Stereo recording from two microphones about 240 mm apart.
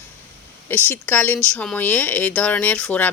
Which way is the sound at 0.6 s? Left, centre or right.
Centre.